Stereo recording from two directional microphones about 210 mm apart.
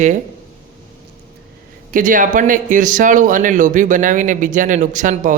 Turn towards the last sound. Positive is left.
turn(degrees=-40)  # may be behind; listen again after turning